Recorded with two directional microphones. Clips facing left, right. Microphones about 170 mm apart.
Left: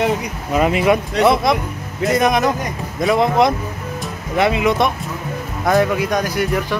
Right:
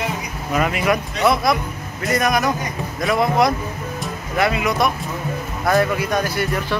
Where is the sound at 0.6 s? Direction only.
25° left (ahead or behind).